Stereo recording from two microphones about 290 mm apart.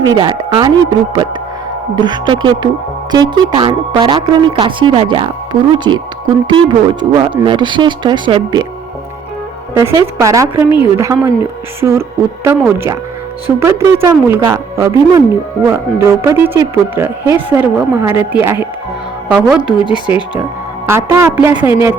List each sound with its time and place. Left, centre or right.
0.0 s speech: centre
9.7 s speech: centre